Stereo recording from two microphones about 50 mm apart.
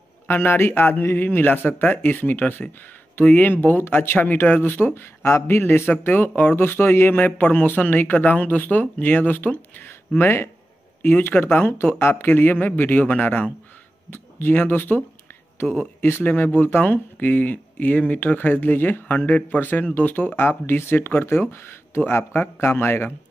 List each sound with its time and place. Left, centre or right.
0.3 s speech: left
3.8 s speech: left
9.8 s speech: left
11.0 s speech: left
12.3 s speech: left
14.1 s speech: left
16.0 s speech: left
16.7 s speech: left